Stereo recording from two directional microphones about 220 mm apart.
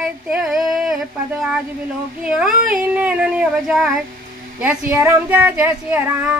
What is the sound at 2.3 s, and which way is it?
Female singing, 5° right (ahead or behind).